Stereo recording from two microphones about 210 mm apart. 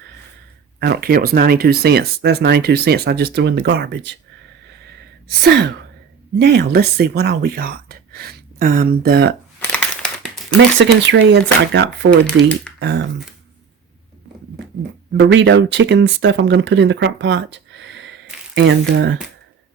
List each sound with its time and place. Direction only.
0.8 s speech: 50° right (ahead or behind)
5.3 s speech: 50° right (ahead or behind)
10.8 s speech: 55° right (ahead or behind)
12.4 s speech: 5° left (ahead or behind)
12.8 s speech: 55° right (ahead or behind)
15.2 s speech: 60° right (ahead or behind)